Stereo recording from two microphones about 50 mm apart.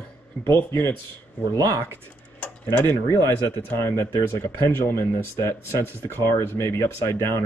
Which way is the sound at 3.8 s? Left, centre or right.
Left.